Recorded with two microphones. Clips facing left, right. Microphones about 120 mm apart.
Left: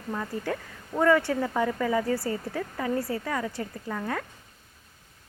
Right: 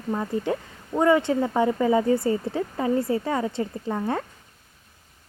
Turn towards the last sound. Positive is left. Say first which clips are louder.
# right 6 dB
turn(degrees=-25)  # may be behind; listen again after turning